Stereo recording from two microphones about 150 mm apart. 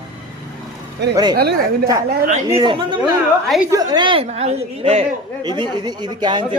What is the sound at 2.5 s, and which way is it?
A man's voice, 30° right (ahead or behind).